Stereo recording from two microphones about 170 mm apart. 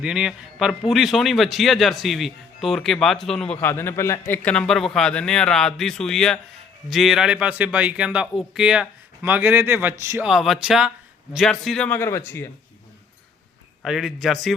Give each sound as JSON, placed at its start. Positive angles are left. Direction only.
{"t": 0.0, "sound": "a man's voice", "side_deg": -5}
{"t": 10.2, "sound": "a man's voice", "side_deg": 0}
{"t": 13.8, "sound": "a man's voice", "side_deg": 0}